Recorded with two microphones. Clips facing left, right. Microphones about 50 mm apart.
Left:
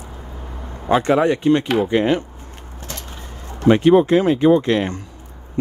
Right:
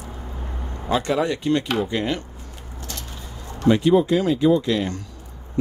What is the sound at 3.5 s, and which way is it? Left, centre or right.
Speech, left.